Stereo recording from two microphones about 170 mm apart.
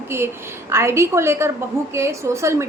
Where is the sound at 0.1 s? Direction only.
15° right (ahead or behind).